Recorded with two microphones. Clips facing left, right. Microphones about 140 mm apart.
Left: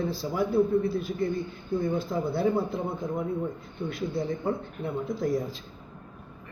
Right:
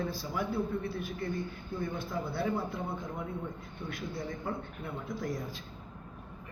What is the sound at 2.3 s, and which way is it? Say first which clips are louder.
A man's voice: left 8 dB; 35° left (ahead or behind).